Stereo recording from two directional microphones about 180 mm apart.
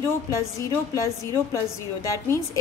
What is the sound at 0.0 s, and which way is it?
A woman's voice, 15° left (ahead or behind).